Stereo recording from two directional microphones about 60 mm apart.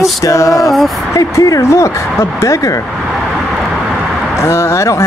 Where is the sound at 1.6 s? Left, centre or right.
Left.